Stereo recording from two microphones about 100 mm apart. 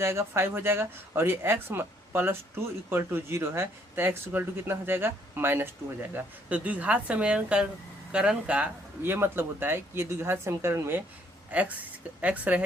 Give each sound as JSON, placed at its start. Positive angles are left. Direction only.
{"t": 0.0, "sound": "speech", "side_deg": -25}
{"t": 11.5, "sound": "a woman's voice", "side_deg": -15}